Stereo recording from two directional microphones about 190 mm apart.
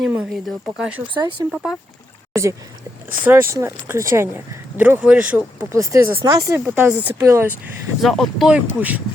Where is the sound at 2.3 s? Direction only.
15° right (ahead or behind).